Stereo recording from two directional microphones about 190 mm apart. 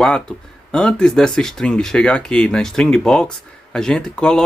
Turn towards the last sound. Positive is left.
turn(degrees=5)  # may be behind; listen again after turning